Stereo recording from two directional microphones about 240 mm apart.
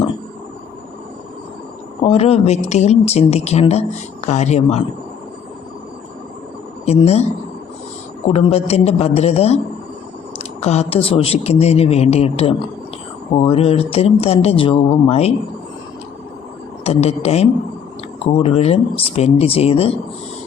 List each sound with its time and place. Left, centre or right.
2.0 s speech: left
6.8 s speech: left
16.8 s speech: left